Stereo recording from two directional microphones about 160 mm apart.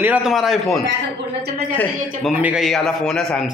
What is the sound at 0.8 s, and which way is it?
Speech, 90° right.